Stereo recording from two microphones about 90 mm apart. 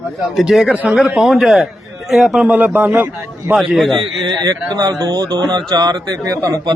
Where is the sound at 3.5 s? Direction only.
Centre (ahead or behind).